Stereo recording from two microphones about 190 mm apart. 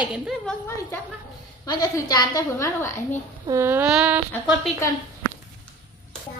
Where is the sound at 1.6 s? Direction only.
20° left (ahead or behind).